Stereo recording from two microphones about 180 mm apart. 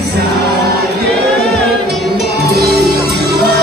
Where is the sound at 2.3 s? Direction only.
60° right (ahead or behind).